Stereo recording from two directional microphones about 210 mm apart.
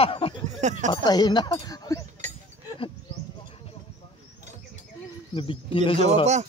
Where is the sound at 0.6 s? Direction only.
35° right (ahead or behind).